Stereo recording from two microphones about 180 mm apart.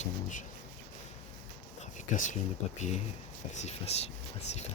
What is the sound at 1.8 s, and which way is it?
Speech, 45° left (ahead or behind).